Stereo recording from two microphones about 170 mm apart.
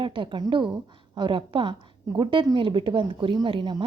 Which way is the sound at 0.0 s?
30° right (ahead or behind).